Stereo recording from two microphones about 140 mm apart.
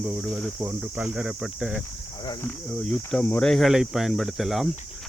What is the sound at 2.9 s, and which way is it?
Speech, 5° left (ahead or behind).